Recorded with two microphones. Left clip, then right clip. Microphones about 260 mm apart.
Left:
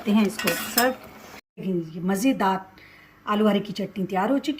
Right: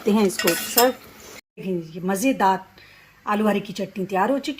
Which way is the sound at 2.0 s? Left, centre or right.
Centre.